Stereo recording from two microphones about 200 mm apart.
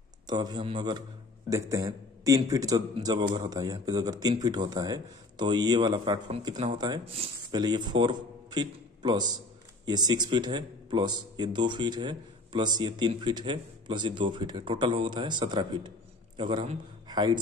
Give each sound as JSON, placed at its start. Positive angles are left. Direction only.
{"t": 0.3, "sound": "a man's voice", "side_deg": -20}